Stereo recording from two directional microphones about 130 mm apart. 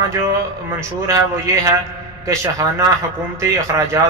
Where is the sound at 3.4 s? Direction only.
25° right (ahead or behind).